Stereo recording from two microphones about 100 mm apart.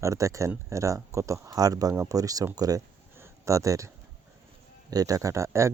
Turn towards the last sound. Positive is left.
turn(degrees=-30)  # may be behind; listen again after turning